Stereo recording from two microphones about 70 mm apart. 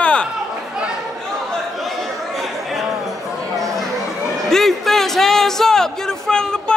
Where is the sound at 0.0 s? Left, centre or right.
Centre.